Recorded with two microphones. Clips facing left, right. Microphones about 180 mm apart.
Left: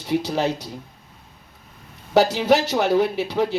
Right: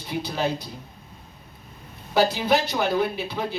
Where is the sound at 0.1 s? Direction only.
80° left.